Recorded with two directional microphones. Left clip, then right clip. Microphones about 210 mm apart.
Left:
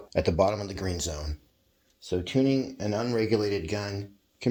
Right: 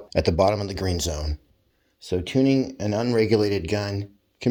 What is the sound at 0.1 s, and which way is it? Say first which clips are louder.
Speech: right 4 dB; 40° right (ahead or behind).